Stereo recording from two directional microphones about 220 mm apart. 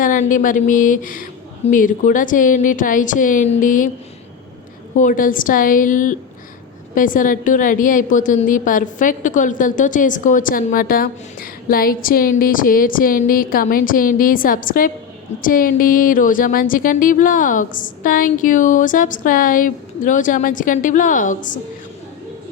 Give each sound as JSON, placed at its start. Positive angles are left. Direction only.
{"t": 0.0, "sound": "a woman's voice", "side_deg": 35}
{"t": 4.9, "sound": "a woman's voice", "side_deg": 35}